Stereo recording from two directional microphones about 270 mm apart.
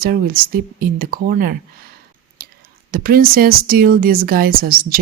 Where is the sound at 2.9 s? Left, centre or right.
Right.